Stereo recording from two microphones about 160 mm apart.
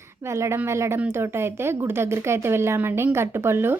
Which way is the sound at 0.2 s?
15° right (ahead or behind).